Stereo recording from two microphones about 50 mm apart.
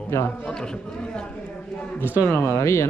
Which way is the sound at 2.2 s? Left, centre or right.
Left.